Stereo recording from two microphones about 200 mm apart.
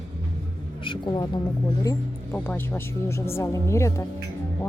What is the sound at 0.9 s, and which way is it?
Speech, 20° left (ahead or behind).